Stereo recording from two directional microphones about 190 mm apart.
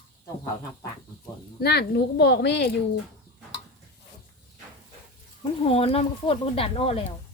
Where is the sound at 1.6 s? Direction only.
60° left (ahead or behind).